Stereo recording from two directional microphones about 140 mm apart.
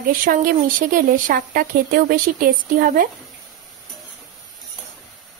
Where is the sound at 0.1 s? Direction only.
75° right (ahead or behind).